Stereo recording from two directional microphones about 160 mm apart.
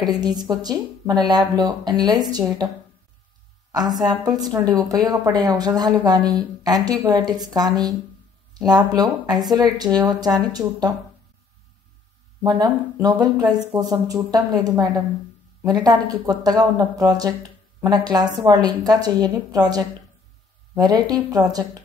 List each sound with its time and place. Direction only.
0.1 s a woman's voice: 25° right (ahead or behind)
4.0 s a woman's voice: 25° right (ahead or behind)
12.4 s a woman's voice: 25° right (ahead or behind)
20.7 s a woman's voice: 25° right (ahead or behind)